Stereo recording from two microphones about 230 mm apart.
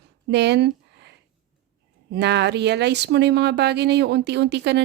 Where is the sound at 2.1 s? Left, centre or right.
Right.